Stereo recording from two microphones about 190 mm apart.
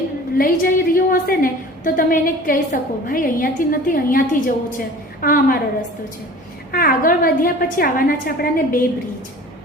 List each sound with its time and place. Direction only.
0.3 s a woman's voice: 50° left (ahead or behind)
6.7 s a woman's voice: 50° left (ahead or behind)